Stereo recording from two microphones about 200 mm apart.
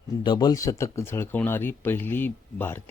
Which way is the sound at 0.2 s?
20° left (ahead or behind).